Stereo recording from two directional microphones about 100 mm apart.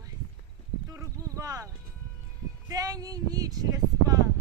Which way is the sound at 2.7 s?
40° right (ahead or behind).